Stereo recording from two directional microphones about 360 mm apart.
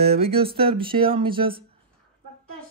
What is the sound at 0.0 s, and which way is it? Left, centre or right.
Speech, centre.